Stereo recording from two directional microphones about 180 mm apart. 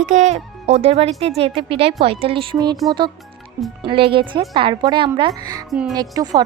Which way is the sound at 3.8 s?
30° right (ahead or behind).